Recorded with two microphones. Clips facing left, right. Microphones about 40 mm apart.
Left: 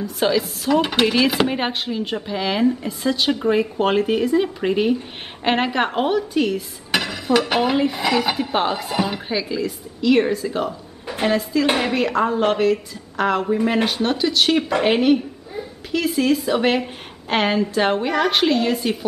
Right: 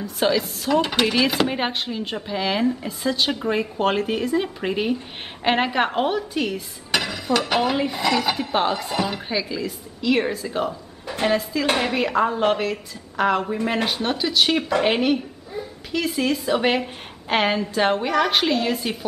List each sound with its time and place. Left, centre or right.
0.0 s dishes: centre